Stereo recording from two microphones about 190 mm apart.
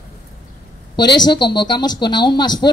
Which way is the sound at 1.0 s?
20° left (ahead or behind).